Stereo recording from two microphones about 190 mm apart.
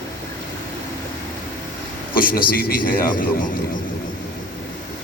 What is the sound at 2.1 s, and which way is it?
A man's voice, 50° left (ahead or behind).